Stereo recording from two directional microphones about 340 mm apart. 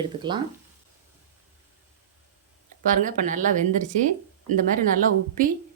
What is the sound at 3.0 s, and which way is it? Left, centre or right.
Speech, right.